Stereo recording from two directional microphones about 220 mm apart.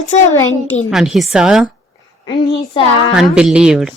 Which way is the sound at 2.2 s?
25° left (ahead or behind).